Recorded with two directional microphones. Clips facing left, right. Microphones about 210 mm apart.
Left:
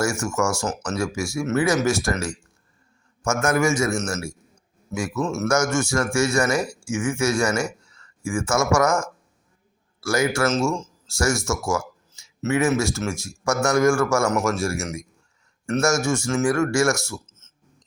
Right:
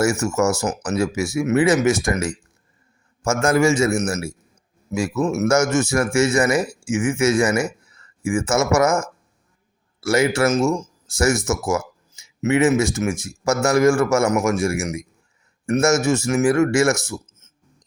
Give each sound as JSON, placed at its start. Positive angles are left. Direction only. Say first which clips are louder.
{"t": 0.0, "sound": "a man's voice", "louder": "right 4 dB", "side_deg": -20}
{"t": 3.2, "sound": "a man's voice", "louder": "right 4 dB", "side_deg": -30}
{"t": 6.6, "sound": "speech", "louder": "right 3 dB", "side_deg": -5}
{"t": 6.8, "sound": "a man's voice", "louder": "right 6 dB", "side_deg": -20}
{"t": 10.0, "sound": "a man's voice", "louder": "right 4 dB", "side_deg": -20}
{"t": 17.1, "sound": "a sound", "louder": "right 4 dB", "side_deg": -15}